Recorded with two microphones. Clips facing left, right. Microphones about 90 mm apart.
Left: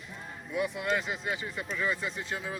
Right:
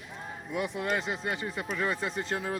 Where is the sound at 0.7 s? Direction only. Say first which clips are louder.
Even; 45° right (ahead or behind); by 2.6 s 60° right (ahead or behind).